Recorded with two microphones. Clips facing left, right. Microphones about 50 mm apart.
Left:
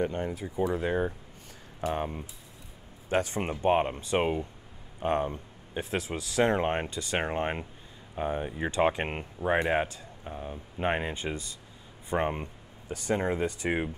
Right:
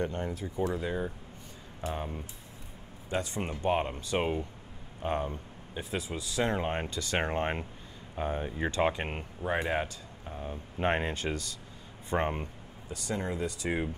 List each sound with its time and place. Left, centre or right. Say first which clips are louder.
0.0 s speech: left 3 dB; centre
0.7 s speech: left 5 dB; left
3.1 s speech: left 5 dB; left
3.3 s speech: left 3 dB; left
5.8 s speech: left 3 dB; left
6.4 s speech: left 5 dB; left
7.2 s speech: left 1 dB; centre
9.0 s speech: left 4 dB; left
10.3 s speech: even; centre
12.8 s speech: left 6 dB; left